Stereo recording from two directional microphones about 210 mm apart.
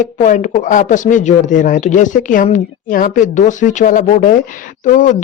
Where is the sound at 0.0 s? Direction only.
35° left (ahead or behind).